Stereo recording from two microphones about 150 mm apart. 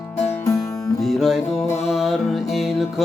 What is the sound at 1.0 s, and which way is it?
Music, centre (ahead or behind).